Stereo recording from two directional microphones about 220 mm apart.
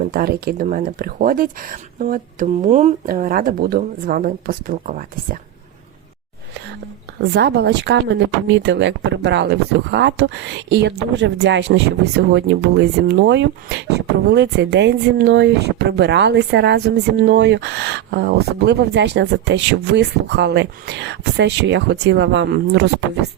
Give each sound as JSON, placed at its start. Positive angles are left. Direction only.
{"t": 0.1, "sound": "speech", "side_deg": -45}
{"t": 7.2, "sound": "a woman's voice", "side_deg": -50}